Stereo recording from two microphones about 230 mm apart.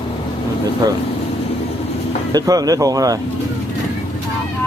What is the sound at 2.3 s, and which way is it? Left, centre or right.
Speech, centre.